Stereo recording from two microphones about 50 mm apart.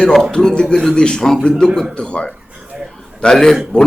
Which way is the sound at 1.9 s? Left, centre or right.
Centre.